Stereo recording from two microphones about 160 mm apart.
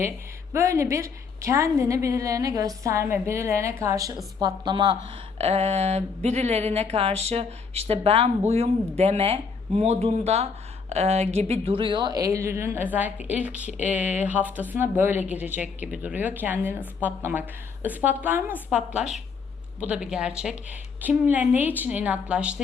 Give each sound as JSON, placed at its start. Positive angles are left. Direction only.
{"t": 0.5, "sound": "a woman's voice", "side_deg": -20}
{"t": 5.4, "sound": "a woman's voice", "side_deg": -40}